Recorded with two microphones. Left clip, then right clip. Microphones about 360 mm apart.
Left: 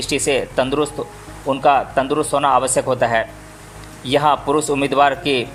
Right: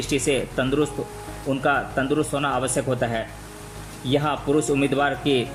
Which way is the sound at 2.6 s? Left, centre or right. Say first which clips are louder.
Left 7 dB; centre.